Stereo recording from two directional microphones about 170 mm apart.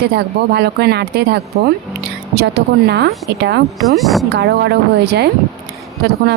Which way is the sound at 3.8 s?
Centre (ahead or behind).